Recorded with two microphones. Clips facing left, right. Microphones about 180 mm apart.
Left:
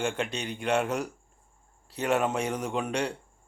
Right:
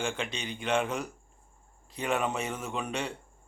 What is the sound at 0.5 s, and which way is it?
Speech, 10° left (ahead or behind).